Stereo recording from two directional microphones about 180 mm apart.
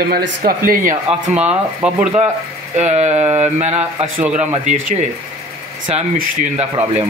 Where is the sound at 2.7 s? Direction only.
40° right (ahead or behind).